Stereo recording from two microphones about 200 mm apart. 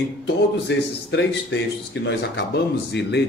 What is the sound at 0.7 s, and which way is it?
Speech, 60° left (ahead or behind).